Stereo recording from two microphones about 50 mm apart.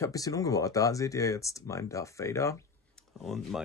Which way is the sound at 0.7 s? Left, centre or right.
Left.